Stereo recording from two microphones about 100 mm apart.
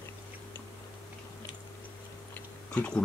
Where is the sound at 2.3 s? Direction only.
15° left (ahead or behind).